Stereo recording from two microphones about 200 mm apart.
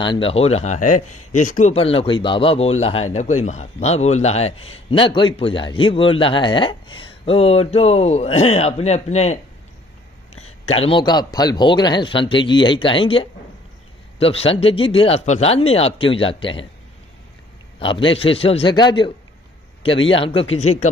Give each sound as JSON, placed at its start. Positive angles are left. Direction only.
{"t": 0.0, "sound": "a man's voice", "side_deg": 25}
{"t": 10.3, "sound": "a sound", "side_deg": 90}
{"t": 10.7, "sound": "a man's voice", "side_deg": 30}
{"t": 17.7, "sound": "a man's voice", "side_deg": 25}